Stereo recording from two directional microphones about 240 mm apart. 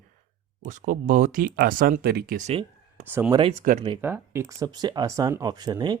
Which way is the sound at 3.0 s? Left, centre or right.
Centre.